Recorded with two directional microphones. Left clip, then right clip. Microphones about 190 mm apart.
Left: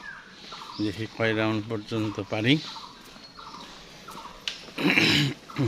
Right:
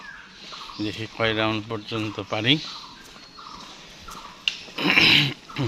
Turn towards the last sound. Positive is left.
turn(degrees=20)  # may be behind; listen again after turning